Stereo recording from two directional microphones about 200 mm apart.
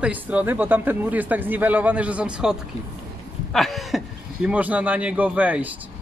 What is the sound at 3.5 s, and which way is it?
Speech, centre (ahead or behind).